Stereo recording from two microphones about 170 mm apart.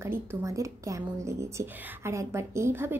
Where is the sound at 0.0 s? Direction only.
15° right (ahead or behind).